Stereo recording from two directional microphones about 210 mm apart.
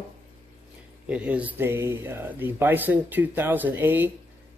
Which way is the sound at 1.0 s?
5° right (ahead or behind).